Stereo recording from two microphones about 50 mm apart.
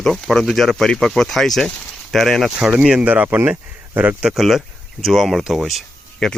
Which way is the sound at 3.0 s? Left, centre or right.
Right.